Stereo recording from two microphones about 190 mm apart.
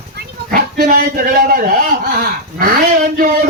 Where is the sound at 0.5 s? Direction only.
45° right (ahead or behind).